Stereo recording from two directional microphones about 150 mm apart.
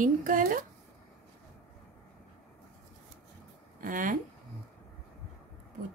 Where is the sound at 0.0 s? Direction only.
65° right (ahead or behind).